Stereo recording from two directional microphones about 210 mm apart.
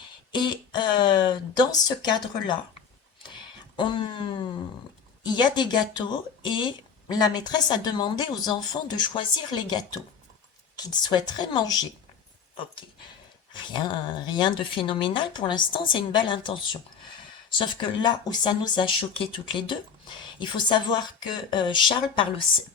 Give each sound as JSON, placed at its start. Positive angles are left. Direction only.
{"t": 0.3, "sound": "speech", "side_deg": 20}
{"t": 3.8, "sound": "speech", "side_deg": 25}
{"t": 13.5, "sound": "speech", "side_deg": 20}